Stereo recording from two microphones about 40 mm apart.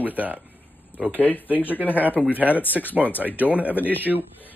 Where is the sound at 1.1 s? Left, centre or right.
Left.